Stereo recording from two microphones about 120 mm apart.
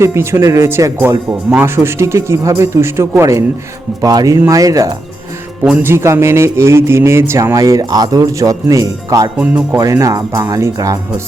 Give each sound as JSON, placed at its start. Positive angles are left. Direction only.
{"t": 0.0, "sound": "speech", "side_deg": -20}
{"t": 5.6, "sound": "speech", "side_deg": -10}
{"t": 5.9, "sound": "speech", "side_deg": -20}